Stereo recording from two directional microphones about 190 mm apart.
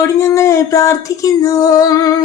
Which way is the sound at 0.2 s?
15° left (ahead or behind).